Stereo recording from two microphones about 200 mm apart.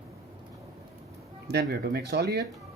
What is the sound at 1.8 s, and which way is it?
Speech, 50° right (ahead or behind).